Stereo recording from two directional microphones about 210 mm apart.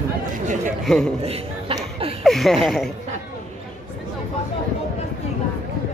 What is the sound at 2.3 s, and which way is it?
Speech, centre (ahead or behind).